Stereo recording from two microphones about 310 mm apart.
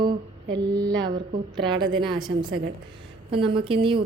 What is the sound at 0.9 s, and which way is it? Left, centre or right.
A woman's voice, centre.